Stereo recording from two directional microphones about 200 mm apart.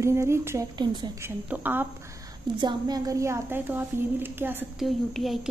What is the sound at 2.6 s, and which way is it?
Speech, 20° right (ahead or behind).